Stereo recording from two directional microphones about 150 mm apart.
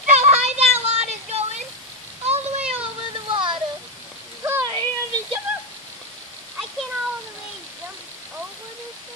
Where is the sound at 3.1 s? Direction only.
35° right (ahead or behind).